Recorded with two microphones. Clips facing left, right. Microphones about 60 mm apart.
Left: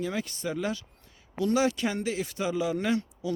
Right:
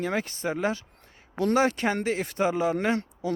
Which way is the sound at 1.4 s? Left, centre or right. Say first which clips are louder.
Right 2 dB; right.